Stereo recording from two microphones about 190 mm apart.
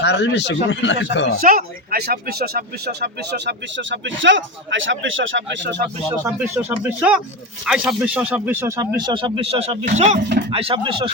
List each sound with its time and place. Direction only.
0.0 s speech: 65° left (ahead or behind)
1.4 s speech: 50° right (ahead or behind); by 5.8 s 75° right (ahead or behind)
6.1 s speech: 15° right (ahead or behind)